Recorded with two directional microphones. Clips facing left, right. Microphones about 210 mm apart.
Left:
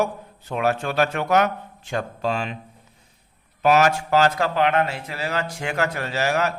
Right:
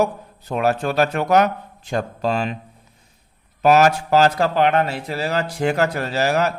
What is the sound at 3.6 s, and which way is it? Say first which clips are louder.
A man's voice: right 3 dB; 40° right (ahead or behind).